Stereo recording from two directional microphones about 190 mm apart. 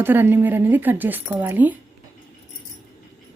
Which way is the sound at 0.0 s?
10° right (ahead or behind).